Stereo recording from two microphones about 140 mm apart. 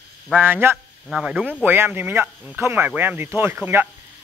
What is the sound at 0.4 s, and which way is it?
Speech, 15° right (ahead or behind).